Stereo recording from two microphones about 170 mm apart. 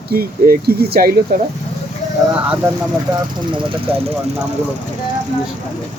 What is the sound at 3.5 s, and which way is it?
Speech, 30° right (ahead or behind).